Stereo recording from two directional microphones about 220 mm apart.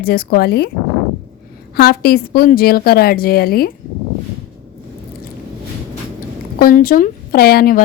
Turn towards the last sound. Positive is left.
turn(degrees=40)  # may be behind; listen again after turning